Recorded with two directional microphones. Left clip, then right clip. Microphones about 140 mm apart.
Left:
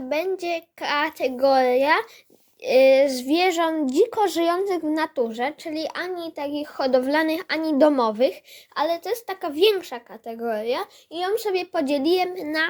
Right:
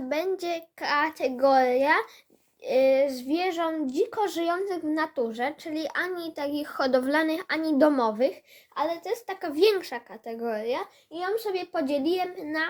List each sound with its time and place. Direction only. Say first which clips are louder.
0.1 s a child's voice: left 4 dB; 15° left (ahead or behind)
2.6 s a woman's voice: left 6 dB; 40° left (ahead or behind)
6.1 s a child's voice: left 2 dB; 10° left (ahead or behind); by 9.5 s 30° left (ahead or behind)
9.6 s a child's voice: left 3 dB; 15° left (ahead or behind)
11.1 s a woman's voice: left 5 dB; 50° left (ahead or behind)